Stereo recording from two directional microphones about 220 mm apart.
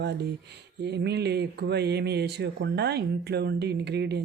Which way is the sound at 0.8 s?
50° right (ahead or behind).